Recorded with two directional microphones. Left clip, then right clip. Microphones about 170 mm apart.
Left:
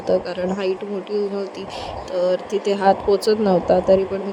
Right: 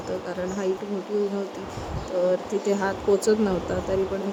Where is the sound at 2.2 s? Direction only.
35° left (ahead or behind).